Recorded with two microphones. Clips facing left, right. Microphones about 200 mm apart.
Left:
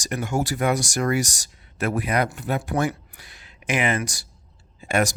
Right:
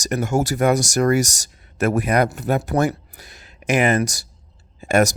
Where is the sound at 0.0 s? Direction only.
40° right (ahead or behind).